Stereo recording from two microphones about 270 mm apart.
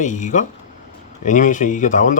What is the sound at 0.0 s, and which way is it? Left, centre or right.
Speech, left.